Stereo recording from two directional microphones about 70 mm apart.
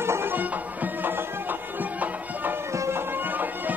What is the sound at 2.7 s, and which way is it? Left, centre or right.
Bagpipes, right.